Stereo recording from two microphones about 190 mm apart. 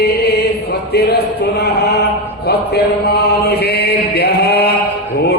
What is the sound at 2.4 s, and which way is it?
Chant, 60° left (ahead or behind).